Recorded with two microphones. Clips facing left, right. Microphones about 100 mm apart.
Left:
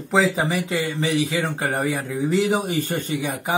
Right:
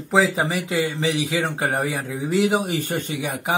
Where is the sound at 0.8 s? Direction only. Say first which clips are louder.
Right 2 dB; 15° right (ahead or behind).